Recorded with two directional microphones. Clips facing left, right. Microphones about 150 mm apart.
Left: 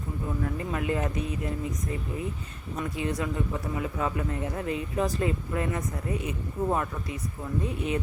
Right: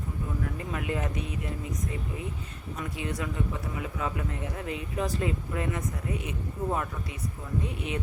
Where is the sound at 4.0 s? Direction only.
40° left (ahead or behind).